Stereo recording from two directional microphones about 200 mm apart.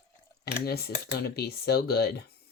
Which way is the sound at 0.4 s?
50° left (ahead or behind).